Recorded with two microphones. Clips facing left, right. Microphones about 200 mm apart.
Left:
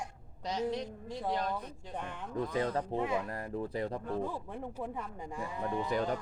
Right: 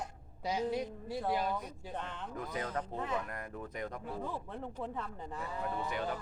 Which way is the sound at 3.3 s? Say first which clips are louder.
Left 6 dB; 30° left (ahead or behind).